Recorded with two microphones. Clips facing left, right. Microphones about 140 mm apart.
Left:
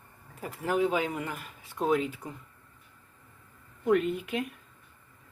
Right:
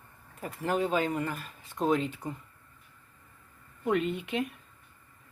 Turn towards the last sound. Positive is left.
turn(degrees=0)  # may be behind; listen again after turning